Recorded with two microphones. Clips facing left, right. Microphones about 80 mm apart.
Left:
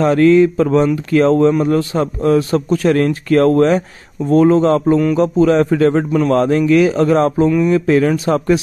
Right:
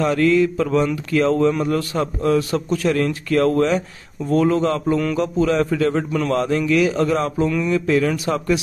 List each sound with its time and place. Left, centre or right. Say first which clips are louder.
0.0 s a man's voice: left 6 dB; left
1.5 s a man's voice: left 6 dB; left
7.4 s a sound: left 7 dB; left
7.7 s a man's voice: left 5 dB; left